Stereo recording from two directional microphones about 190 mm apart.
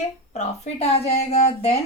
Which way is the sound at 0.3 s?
35° left (ahead or behind).